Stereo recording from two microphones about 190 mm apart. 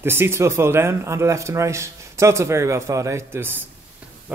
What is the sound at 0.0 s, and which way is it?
Speech, 10° right (ahead or behind).